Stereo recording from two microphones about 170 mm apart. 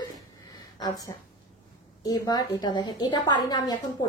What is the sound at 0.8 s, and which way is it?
A woman's voice, 20° left (ahead or behind).